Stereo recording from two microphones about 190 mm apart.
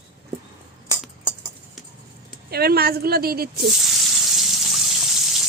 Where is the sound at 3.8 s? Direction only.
Centre (ahead or behind).